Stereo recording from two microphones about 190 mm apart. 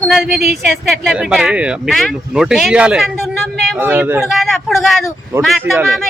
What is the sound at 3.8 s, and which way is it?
Speech, 10° right (ahead or behind).